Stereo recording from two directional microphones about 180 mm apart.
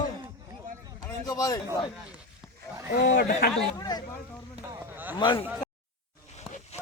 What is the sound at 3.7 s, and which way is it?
Speech, 20° left (ahead or behind).